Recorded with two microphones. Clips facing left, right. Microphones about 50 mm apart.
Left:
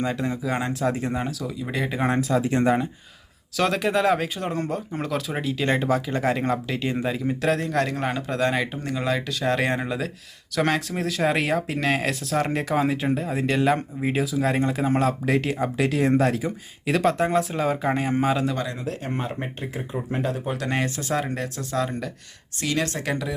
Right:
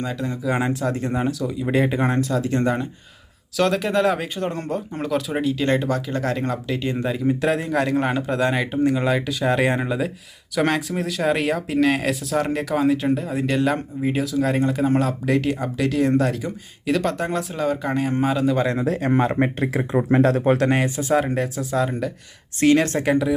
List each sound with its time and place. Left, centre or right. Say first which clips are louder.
0.0 s speech: even; centre
18.7 s speech: right 9 dB; right
20.4 s speech: right 11 dB; right
20.7 s speech: right 5 dB; centre
22.6 s speech: right 9 dB; right
23.0 s speech: right 8 dB; centre